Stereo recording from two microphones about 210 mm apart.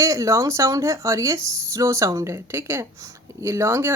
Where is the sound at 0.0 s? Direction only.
15° right (ahead or behind).